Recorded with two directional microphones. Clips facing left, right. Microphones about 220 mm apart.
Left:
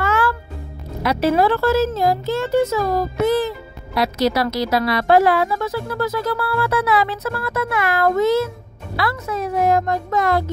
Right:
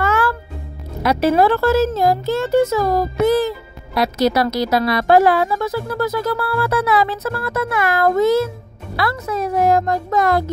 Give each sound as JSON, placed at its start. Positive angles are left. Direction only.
{"t": 0.0, "sound": "music", "side_deg": -45}
{"t": 1.0, "sound": "speech", "side_deg": -45}